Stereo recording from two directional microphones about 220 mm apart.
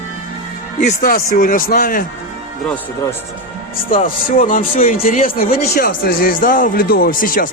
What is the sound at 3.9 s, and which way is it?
Speech, 35° left (ahead or behind).